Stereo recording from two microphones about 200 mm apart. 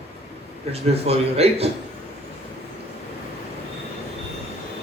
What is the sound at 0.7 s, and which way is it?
A man's voice, 30° right (ahead or behind).